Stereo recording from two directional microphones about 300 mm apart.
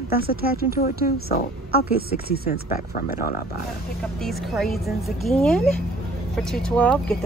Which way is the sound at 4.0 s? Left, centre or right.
Centre.